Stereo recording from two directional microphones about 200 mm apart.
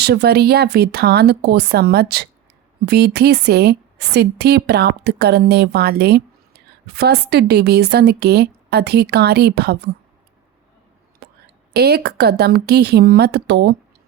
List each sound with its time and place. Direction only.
0.0 s a woman's voice: 55° right (ahead or behind)
11.2 s whispering: 50° right (ahead or behind)
11.7 s speech: 55° right (ahead or behind)